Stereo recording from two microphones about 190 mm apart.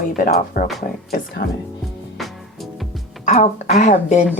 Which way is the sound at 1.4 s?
65° left (ahead or behind).